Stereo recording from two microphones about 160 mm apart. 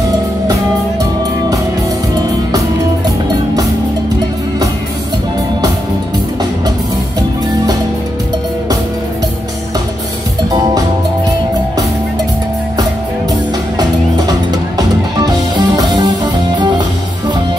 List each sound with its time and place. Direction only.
13.7 s music: 25° right (ahead or behind)